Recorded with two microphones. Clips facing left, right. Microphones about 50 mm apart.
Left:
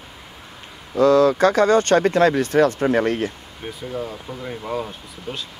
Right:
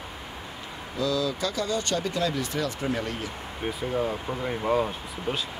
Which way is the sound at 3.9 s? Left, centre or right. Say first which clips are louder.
Right 1 dB; centre.